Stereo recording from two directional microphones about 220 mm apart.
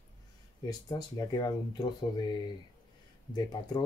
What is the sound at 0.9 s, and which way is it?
Speech, 20° left (ahead or behind).